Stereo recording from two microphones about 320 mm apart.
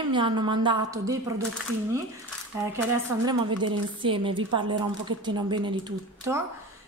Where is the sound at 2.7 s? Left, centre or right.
Centre.